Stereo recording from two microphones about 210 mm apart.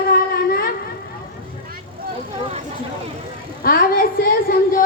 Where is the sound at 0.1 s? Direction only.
45° left (ahead or behind).